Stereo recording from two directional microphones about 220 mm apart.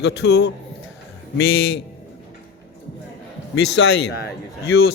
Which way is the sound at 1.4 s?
60° left (ahead or behind).